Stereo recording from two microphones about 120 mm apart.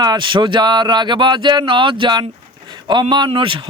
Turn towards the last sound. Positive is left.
turn(degrees=-45)  # may be behind; listen again after turning